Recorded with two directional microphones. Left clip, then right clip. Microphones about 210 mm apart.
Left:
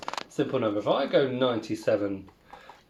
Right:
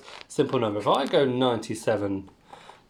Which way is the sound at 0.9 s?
50° right (ahead or behind).